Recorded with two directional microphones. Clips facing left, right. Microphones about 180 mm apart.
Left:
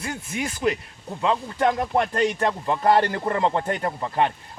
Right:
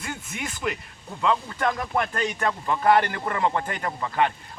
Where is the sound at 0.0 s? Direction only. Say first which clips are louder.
Left 5 dB; 35° left (ahead or behind).